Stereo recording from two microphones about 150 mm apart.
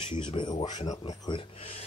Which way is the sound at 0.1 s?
30° left (ahead or behind).